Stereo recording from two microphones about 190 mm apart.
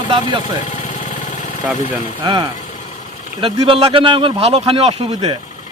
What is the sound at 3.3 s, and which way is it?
Speech, 25° right (ahead or behind).